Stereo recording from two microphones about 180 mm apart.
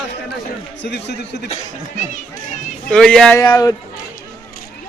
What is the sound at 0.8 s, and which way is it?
Speech, 75° left (ahead or behind).